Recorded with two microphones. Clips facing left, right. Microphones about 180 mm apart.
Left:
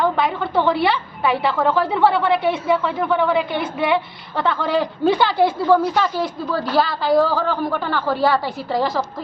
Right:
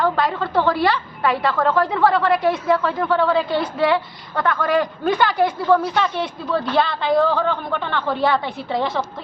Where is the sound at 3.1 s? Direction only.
15° left (ahead or behind).